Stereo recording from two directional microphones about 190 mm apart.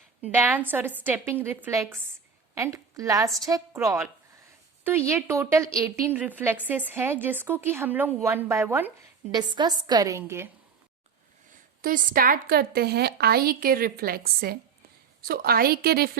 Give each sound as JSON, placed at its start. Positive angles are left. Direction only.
{"t": 0.2, "sound": "a woman's voice", "side_deg": -10}
{"t": 9.3, "sound": "a woman's voice", "side_deg": -25}
{"t": 11.8, "sound": "a woman's voice", "side_deg": -50}